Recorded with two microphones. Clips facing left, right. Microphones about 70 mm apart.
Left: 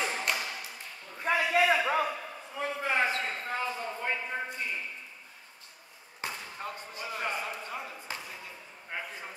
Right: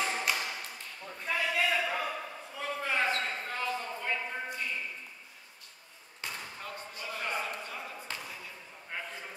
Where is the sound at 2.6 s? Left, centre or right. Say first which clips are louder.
Left 2 dB; left.